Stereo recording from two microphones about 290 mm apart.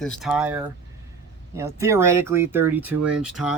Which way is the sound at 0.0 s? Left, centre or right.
Centre.